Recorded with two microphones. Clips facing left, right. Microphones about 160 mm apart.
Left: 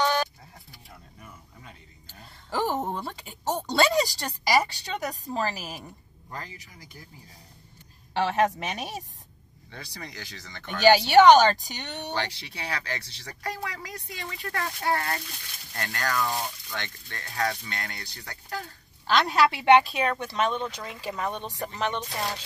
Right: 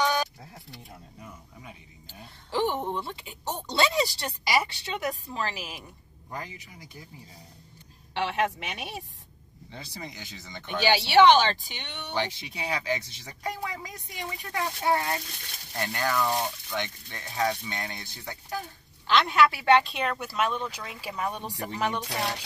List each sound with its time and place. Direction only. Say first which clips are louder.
0.0 s a sound: left 1 dB; 15° right (ahead or behind)
1.2 s speech: right 3 dB; 10° right (ahead or behind)
2.5 s speech: even; 40° left (ahead or behind)
6.3 s speech: right 2 dB; 15° right (ahead or behind)
8.1 s speech: left 4 dB; 40° left (ahead or behind)
9.7 s speech: right 1 dB; 20° right (ahead or behind)
10.8 s speech: left 3 dB; 45° left (ahead or behind)
12.1 s speech: right 3 dB; 20° right (ahead or behind)
19.0 s speech: even; 35° left (ahead or behind)
19.5 s speech: left 7 dB; 20° left (ahead or behind)
19.8 s speech: left 3 dB; centre (ahead or behind)